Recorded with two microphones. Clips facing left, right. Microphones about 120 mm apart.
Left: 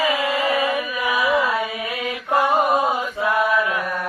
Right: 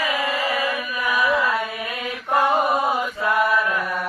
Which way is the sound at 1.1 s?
10° left (ahead or behind).